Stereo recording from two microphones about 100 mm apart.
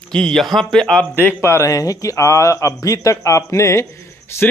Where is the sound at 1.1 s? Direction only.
25° left (ahead or behind).